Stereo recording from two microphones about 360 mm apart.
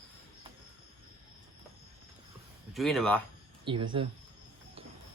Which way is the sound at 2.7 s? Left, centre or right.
Centre.